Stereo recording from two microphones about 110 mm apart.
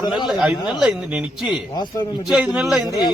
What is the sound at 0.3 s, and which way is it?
Speech, 5° right (ahead or behind).